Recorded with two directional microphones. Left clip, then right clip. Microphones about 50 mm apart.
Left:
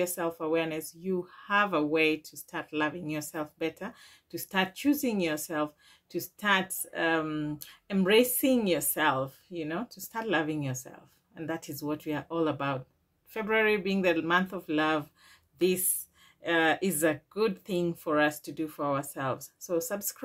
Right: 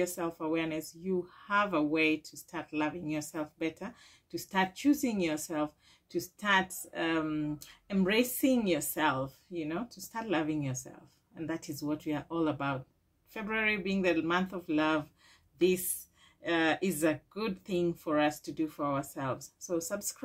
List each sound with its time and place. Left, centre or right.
0.0 s speech: left